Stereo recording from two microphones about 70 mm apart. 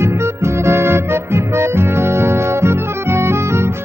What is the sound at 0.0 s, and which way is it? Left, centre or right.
Music, right.